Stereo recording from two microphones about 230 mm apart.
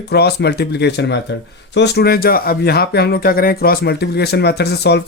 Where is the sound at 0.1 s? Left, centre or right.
Left.